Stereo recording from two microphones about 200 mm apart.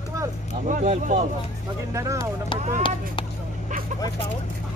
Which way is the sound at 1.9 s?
15° right (ahead or behind).